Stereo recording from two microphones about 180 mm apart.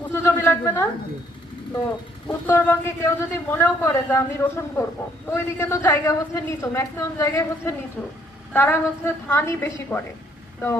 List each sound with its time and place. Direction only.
0.1 s a sound: 15° left (ahead or behind)
2.2 s speech: 10° left (ahead or behind)
8.0 s a woman's voice: 5° left (ahead or behind)